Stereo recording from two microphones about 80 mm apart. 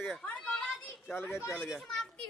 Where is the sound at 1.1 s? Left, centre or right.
Left.